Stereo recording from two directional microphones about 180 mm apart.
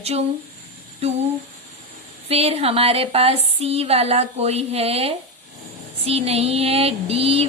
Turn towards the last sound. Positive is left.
turn(degrees=-30)  # may be behind; listen again after turning